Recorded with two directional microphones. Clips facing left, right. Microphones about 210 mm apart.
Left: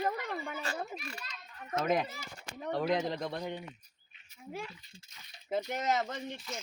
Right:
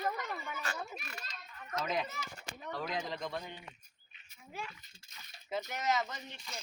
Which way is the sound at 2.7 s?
65° left (ahead or behind).